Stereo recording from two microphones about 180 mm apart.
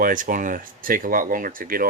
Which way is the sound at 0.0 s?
50° right (ahead or behind).